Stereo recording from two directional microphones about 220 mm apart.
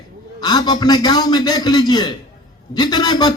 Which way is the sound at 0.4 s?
20° left (ahead or behind).